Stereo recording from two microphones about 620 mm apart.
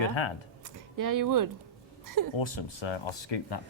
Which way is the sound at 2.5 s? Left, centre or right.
Left.